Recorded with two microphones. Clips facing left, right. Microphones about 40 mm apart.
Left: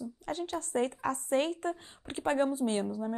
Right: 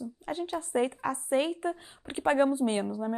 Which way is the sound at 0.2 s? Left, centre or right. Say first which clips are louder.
Right 2 dB; centre.